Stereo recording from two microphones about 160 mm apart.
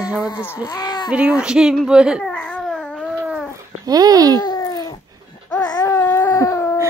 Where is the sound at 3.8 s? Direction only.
25° right (ahead or behind).